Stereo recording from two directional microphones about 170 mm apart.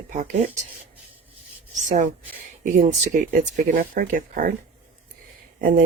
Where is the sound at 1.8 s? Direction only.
50° right (ahead or behind).